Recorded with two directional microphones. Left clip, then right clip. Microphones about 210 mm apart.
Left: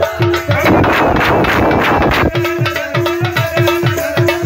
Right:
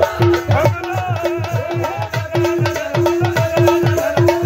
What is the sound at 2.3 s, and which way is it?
Music, 20° right (ahead or behind).